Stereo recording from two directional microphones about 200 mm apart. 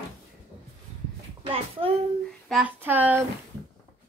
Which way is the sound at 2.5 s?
5° right (ahead or behind).